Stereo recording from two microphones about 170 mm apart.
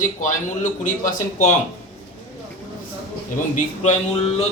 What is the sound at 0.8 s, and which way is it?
Speech, 50° left (ahead or behind).